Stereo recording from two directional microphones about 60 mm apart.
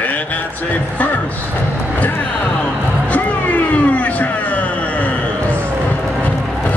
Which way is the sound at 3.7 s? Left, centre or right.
Left.